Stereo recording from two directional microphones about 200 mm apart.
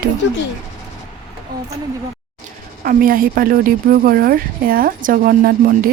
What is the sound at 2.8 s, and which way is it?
Speech, 45° right (ahead or behind).